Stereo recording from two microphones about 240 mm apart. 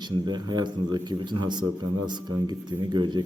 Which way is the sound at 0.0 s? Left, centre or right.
Centre.